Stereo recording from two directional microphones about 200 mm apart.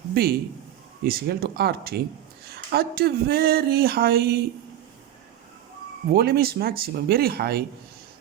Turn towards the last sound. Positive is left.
turn(degrees=-50)  # may be behind; listen again after turning